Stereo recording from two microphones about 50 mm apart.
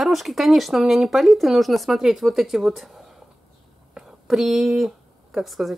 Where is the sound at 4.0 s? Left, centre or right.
Centre.